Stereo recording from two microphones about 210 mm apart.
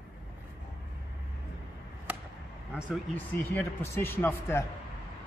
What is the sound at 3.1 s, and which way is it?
Speech, 10° left (ahead or behind).